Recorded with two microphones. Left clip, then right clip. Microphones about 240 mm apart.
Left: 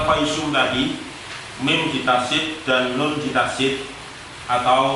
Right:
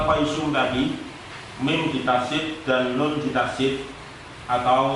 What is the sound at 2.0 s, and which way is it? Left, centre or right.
A man's voice, centre.